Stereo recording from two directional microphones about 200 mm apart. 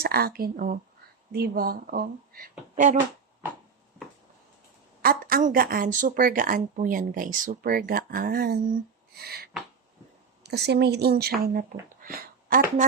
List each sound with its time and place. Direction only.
0.0 s speech: 50° right (ahead or behind)
5.0 s speech: 45° right (ahead or behind)